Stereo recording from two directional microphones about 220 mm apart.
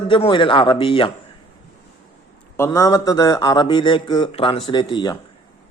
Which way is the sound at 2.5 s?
10° left (ahead or behind).